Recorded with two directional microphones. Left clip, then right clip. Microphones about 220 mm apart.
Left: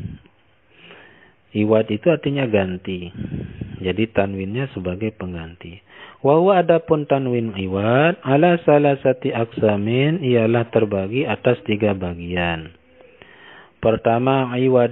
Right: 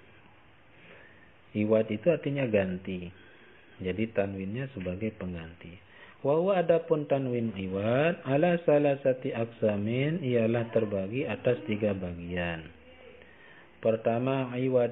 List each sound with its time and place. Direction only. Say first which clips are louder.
1.5 s a man's voice: left 9 dB; 40° left (ahead or behind)